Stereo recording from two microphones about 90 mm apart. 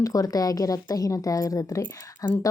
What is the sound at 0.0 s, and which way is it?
A woman's voice, 40° left (ahead or behind).